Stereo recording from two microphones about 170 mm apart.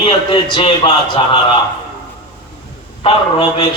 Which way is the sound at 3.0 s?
35° left (ahead or behind).